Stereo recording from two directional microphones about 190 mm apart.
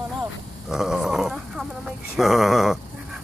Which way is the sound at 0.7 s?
Centre (ahead or behind).